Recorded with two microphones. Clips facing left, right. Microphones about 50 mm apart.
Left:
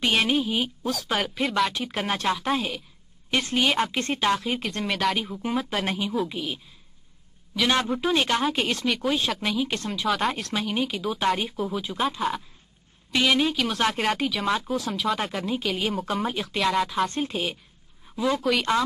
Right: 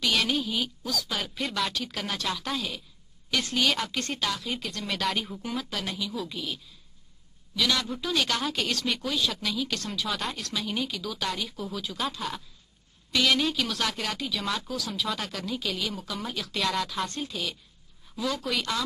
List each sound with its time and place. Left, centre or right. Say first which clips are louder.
0.0 s speech: left 4 dB; left
1.2 s speech: left 6 dB; centre
1.7 s a woman's voice: left 5 dB; left
5.1 s speech: left 3 dB; centre
5.4 s a woman's voice: left 6 dB; left
7.6 s a woman's voice: left 5 dB; left
10.0 s speech: left 10 dB; centre
10.3 s speech: left 4 dB; left
11.6 s a woman's voice: left 4 dB; left
13.7 s speech: left 6 dB; left
14.4 s a woman's voice: left 6 dB; left
16.5 s a woman's voice: left 5 dB; left
17.1 s speech: left 6 dB; left
18.1 s speech: left 6 dB; left